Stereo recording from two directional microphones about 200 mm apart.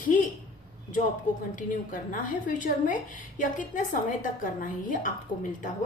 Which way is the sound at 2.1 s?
40° left (ahead or behind).